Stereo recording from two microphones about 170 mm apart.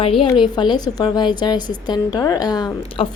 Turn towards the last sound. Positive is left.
turn(degrees=25)  # may be behind; listen again after turning